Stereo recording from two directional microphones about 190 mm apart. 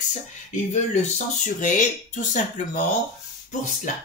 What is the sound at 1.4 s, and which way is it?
Speech, 40° left (ahead or behind).